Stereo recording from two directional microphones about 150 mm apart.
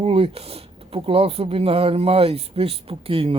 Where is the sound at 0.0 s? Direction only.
40° right (ahead or behind).